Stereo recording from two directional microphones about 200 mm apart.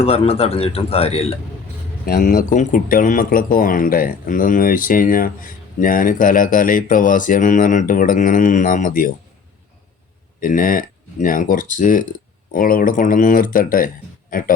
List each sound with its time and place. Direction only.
0.0 s speech: 30° left (ahead or behind)
2.0 s speech: 45° left (ahead or behind)
10.4 s speech: 45° left (ahead or behind)